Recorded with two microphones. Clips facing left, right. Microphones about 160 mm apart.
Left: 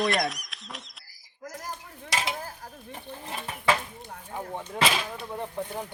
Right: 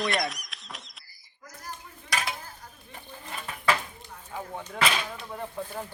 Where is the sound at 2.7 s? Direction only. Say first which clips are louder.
Left 6 dB; 65° left (ahead or behind).